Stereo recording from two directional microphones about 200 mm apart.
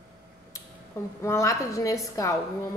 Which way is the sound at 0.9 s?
15° left (ahead or behind).